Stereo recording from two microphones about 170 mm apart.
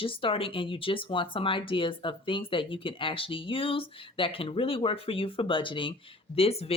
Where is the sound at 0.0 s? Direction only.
30° left (ahead or behind).